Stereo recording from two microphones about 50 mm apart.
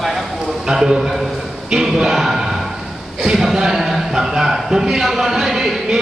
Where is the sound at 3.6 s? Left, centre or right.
Centre.